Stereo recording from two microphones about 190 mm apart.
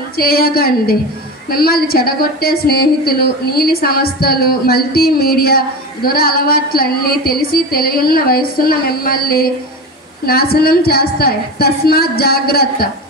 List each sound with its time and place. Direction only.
0.2 s a woman's voice: 50° left (ahead or behind)